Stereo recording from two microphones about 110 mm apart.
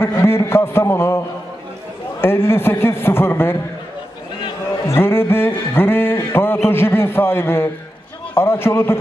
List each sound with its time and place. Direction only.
0.0 s a man's voice: 25° left (ahead or behind)
2.2 s a man's voice: 20° left (ahead or behind)
4.8 s music: 20° left (ahead or behind)
8.4 s a man's voice: 20° left (ahead or behind)